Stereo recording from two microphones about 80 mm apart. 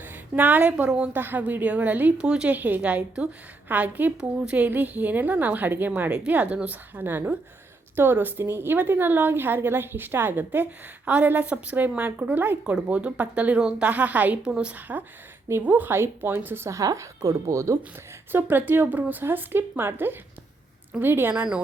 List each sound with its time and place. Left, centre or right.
0.0 s a woman's voice: right
1.1 s a woman's voice: right
12.7 s a woman's voice: centre
16.6 s speech: right
18.3 s a woman's voice: right